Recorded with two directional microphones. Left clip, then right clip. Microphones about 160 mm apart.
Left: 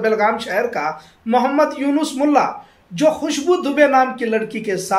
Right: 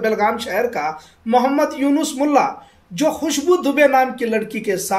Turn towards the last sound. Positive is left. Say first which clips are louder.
# even
turn(degrees=-40)  # may be behind; listen again after turning